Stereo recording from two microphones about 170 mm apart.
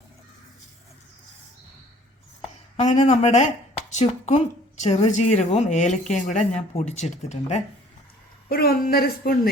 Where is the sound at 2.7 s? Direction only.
40° left (ahead or behind).